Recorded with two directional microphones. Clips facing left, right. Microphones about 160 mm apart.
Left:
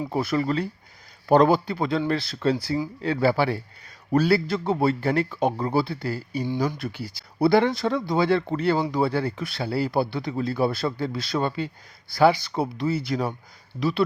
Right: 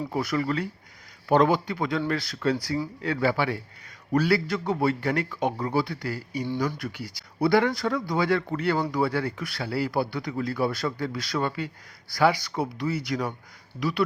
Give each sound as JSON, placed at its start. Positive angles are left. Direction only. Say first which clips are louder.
{"t": 0.1, "sound": "a man's voice", "louder": "left 3 dB", "side_deg": 25}